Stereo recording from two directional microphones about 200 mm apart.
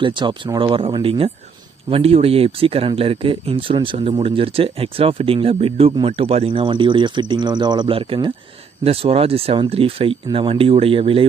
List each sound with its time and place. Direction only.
0.0 s speech: 25° right (ahead or behind)